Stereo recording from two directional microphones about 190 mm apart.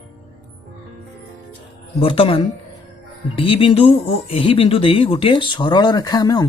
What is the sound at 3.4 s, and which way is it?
Speech, 30° left (ahead or behind).